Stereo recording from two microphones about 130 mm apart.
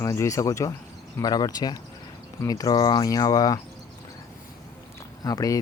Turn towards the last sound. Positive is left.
turn(degrees=25)  # may be behind; listen again after turning